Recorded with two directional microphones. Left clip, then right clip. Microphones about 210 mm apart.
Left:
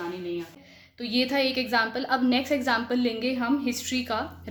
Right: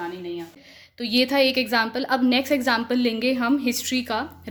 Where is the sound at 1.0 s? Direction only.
40° right (ahead or behind).